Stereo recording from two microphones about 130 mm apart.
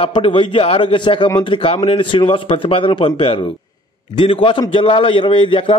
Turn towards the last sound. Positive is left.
turn(degrees=45)  # may be behind; listen again after turning